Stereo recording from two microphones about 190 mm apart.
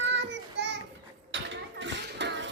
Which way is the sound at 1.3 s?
75° right (ahead or behind).